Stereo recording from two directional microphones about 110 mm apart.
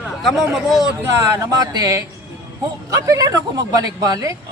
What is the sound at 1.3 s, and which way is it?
Speech, 35° right (ahead or behind).